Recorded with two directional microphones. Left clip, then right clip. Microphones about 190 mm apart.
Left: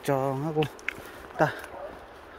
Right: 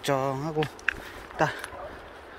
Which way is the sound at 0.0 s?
30° left (ahead or behind).